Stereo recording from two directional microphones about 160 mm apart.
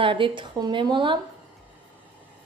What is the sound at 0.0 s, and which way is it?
A woman's voice, 30° right (ahead or behind).